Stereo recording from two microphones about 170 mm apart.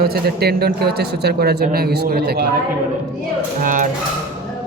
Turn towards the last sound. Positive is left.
turn(degrees=-50)  # may be behind; listen again after turning